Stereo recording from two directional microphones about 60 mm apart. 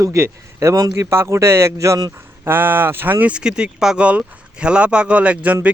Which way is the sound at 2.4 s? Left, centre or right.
Right.